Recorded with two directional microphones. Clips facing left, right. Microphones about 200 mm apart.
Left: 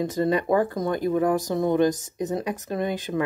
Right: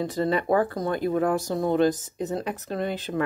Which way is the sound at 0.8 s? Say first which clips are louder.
Left 1 dB; 20° left (ahead or behind).